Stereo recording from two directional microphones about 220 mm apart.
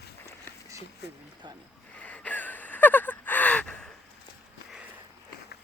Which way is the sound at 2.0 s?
5° left (ahead or behind).